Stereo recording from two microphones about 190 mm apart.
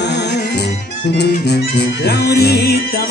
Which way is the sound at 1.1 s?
60° left (ahead or behind).